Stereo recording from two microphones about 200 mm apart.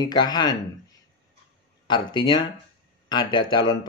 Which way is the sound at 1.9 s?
25° left (ahead or behind).